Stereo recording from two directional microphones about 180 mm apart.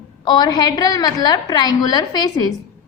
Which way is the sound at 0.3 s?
20° left (ahead or behind).